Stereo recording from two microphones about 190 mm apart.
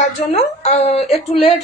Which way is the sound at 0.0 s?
35° left (ahead or behind).